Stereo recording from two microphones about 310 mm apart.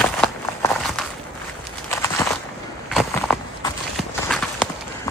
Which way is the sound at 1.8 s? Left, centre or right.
Centre.